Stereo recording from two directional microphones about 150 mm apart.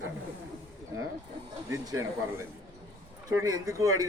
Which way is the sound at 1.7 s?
20° right (ahead or behind).